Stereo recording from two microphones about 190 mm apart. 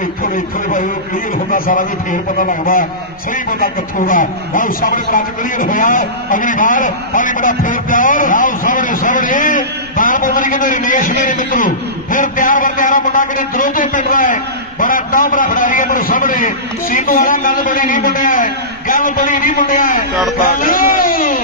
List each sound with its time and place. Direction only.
0.2 s a man's voice: 50° left (ahead or behind)